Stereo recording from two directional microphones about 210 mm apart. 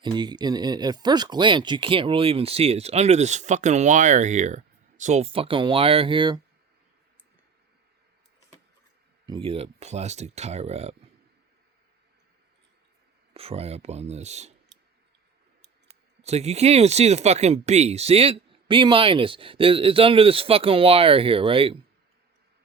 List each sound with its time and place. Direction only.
0.0 s speech: 20° right (ahead or behind)
9.2 s speech: 25° right (ahead or behind)
13.3 s speech: 30° right (ahead or behind)
16.2 s speech: 30° right (ahead or behind)